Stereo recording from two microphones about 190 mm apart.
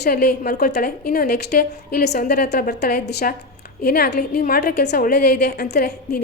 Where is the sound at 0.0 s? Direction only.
55° left (ahead or behind).